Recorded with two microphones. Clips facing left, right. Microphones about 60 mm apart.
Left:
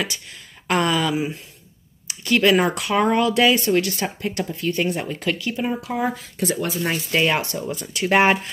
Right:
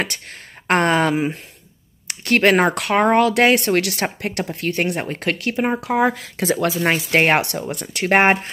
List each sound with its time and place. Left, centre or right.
0.7 s speech: right
7.9 s speech: right